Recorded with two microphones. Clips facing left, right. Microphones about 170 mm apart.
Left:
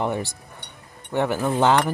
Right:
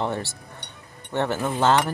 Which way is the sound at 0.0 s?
15° left (ahead or behind).